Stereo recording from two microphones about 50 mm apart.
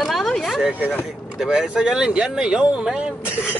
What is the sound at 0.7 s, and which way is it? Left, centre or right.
Speech, right.